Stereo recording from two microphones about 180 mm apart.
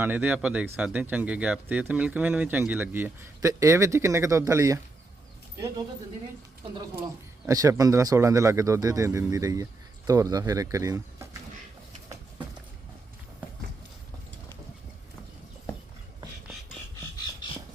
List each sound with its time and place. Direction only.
0.0 s speech: 10° right (ahead or behind)
7.4 s speech: 20° right (ahead or behind)